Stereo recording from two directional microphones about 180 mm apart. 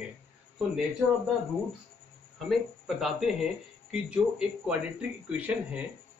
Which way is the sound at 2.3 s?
Centre (ahead or behind).